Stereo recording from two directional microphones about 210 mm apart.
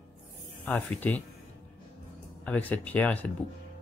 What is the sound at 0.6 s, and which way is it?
Speech, 10° left (ahead or behind).